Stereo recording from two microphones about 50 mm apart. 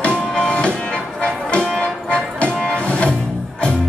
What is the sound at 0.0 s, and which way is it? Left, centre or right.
Music, centre.